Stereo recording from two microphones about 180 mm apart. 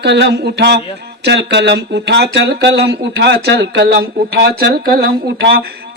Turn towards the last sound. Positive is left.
turn(degrees=-60)  # may be behind; listen again after turning